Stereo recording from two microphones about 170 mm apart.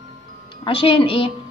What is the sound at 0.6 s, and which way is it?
Speech, 30° left (ahead or behind).